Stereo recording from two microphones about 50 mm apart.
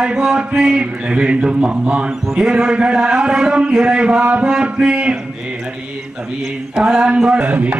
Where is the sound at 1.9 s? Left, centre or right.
Centre.